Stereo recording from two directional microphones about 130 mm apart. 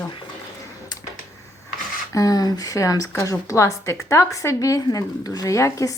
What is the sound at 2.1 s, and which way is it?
Speech, 25° left (ahead or behind).